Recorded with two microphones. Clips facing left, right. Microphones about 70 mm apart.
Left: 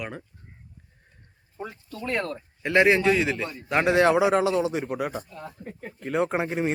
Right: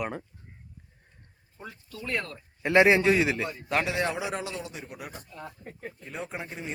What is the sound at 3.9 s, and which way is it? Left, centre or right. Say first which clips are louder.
A man's voice: left 11 dB; left.